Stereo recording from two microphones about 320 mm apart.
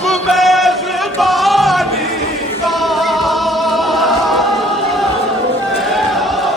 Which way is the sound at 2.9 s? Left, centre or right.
Centre.